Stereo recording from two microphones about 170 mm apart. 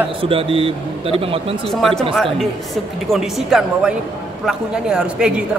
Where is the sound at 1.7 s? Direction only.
Centre (ahead or behind).